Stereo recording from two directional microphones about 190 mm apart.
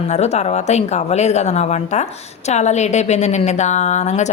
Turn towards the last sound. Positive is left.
turn(degrees=35)  # may be behind; listen again after turning